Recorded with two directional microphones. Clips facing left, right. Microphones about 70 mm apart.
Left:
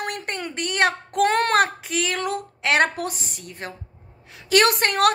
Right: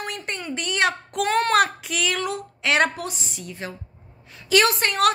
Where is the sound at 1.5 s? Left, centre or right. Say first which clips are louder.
Even; left.